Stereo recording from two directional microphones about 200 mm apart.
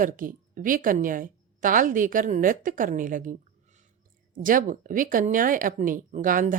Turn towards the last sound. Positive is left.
turn(degrees=-40)  # may be behind; listen again after turning